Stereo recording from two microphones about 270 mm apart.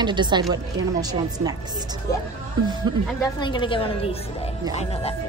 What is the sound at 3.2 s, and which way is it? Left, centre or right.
A woman's voice, centre.